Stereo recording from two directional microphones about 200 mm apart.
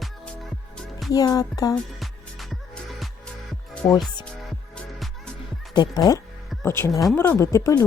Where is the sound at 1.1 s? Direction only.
20° left (ahead or behind).